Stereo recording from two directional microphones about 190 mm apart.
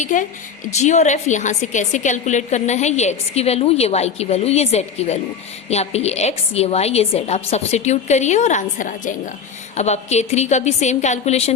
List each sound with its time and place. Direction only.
0.0 s a woman's voice: 40° left (ahead or behind)